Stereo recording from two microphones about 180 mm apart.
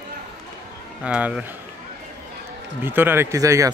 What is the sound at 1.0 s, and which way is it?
Speech, 5° right (ahead or behind).